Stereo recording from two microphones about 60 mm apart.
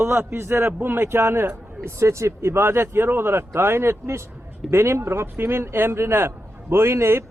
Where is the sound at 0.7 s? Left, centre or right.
Right.